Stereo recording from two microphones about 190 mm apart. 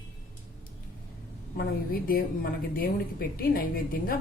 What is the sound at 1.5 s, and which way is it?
A woman's voice, 50° left (ahead or behind).